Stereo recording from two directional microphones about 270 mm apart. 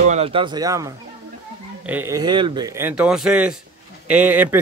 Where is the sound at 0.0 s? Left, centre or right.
Right.